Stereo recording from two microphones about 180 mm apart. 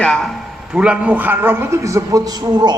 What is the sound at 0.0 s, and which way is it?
A man's voice, 5° left (ahead or behind).